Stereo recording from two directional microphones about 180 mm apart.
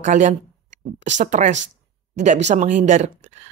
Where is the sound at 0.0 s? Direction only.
45° right (ahead or behind).